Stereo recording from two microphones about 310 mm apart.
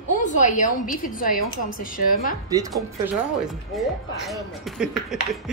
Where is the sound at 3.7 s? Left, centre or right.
Centre.